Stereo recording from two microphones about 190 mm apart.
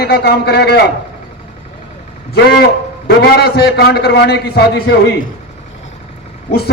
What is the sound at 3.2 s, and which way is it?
A man's voice, 55° left (ahead or behind).